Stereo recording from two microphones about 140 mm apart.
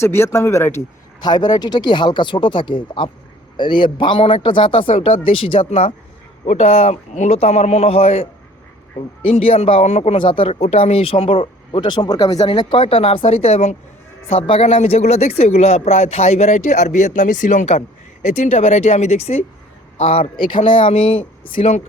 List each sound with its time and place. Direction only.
0.0 s speech: 20° left (ahead or behind)
1.2 s speech: 30° left (ahead or behind); by 10.0 s 45° left (ahead or behind)
10.0 s speech: 35° left (ahead or behind)